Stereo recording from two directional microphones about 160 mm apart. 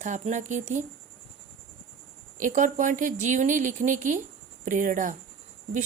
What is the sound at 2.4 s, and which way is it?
Speech, 55° right (ahead or behind).